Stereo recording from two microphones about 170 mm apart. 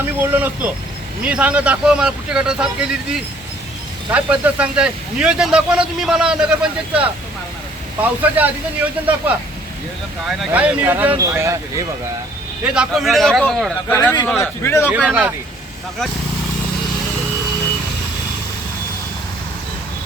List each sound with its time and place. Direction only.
0.0 s speech: 10° right (ahead or behind)
12.6 s a man's voice: 5° right (ahead or behind); by 14.8 s 15° left (ahead or behind)
14.9 s speech: 10° right (ahead or behind)